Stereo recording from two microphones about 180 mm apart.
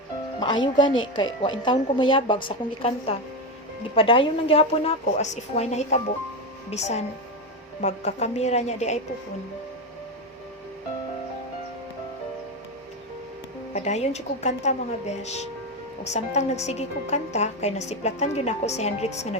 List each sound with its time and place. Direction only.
0.3 s a woman's voice: 25° left (ahead or behind)
13.7 s a woman's voice: 40° left (ahead or behind)